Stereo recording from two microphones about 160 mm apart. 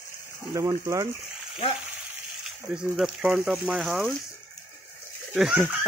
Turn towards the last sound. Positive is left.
turn(degrees=-5)  # may be behind; listen again after turning